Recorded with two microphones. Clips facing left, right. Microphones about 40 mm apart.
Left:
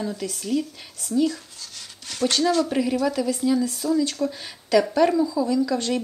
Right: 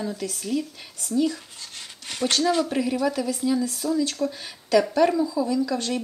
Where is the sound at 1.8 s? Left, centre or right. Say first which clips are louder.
Left 2 dB; right.